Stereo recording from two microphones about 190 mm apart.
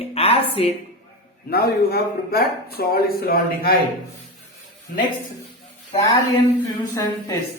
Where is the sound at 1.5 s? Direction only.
55° left (ahead or behind).